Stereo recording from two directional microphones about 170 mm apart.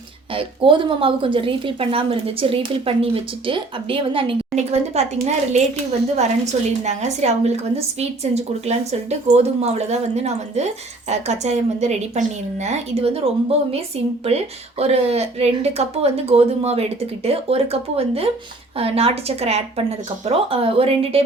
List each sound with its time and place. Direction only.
0.3 s a woman's voice: 30° right (ahead or behind)